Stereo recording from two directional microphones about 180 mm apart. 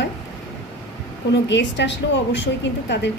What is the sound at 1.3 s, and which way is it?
A woman's voice, 80° left.